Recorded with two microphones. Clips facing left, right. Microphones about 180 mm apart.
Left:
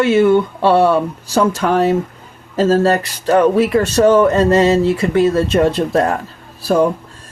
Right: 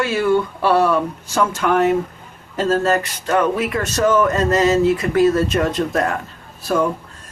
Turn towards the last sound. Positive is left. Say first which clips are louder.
# left 5 dB
turn(degrees=35)  # may be behind; listen again after turning